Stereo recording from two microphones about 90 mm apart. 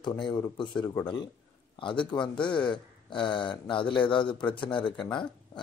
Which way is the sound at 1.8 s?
70° left (ahead or behind).